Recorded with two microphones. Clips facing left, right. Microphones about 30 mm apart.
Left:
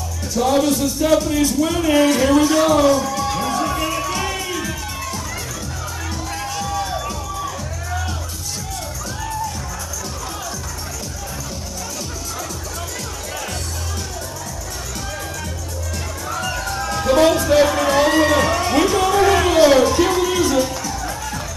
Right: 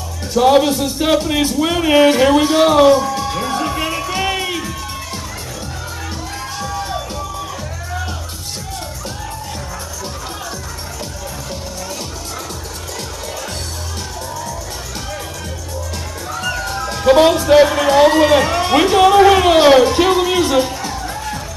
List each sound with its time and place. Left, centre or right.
0.3 s speech: right
3.2 s music: centre; by 4.6 s right
16.3 s music: centre
16.9 s music: right